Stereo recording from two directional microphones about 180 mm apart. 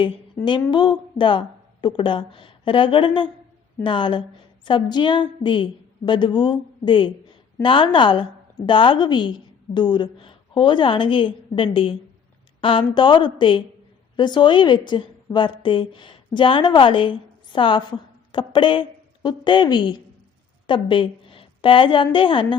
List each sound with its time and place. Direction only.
0.4 s a woman's voice: 25° left (ahead or behind)